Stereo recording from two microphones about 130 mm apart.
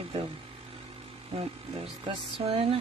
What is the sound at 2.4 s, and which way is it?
Speech, 45° right (ahead or behind).